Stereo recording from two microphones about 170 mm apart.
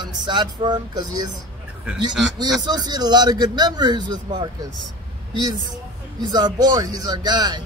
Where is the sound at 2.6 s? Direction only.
25° right (ahead or behind).